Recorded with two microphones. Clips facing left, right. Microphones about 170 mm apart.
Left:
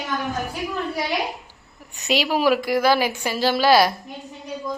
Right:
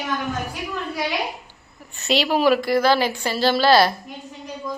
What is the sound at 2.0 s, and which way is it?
A woman's voice, 10° left (ahead or behind).